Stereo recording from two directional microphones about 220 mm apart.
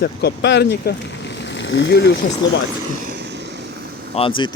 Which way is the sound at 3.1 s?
50° right (ahead or behind).